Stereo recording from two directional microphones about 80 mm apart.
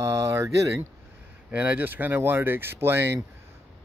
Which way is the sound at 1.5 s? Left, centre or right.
Centre.